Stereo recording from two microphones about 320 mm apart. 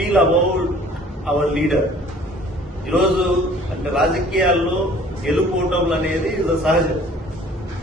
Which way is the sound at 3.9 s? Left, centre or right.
Centre.